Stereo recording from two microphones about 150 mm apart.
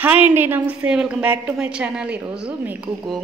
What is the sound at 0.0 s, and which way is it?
A woman's voice, 10° right (ahead or behind).